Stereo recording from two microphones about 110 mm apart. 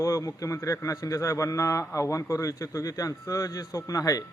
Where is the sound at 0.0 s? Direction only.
30° left (ahead or behind).